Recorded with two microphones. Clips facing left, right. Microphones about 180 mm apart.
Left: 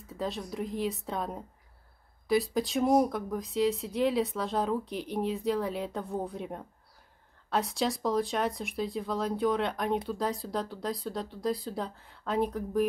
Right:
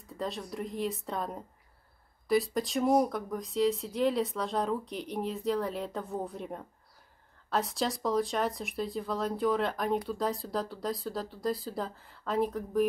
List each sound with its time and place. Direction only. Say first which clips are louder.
0.1 s speech: left 1 dB; centre (ahead or behind)